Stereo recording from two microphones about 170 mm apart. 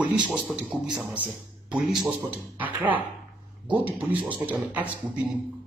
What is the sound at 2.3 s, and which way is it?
Speech, 10° right (ahead or behind).